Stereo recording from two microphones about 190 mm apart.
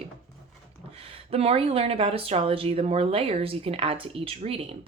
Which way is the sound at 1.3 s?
30° right (ahead or behind).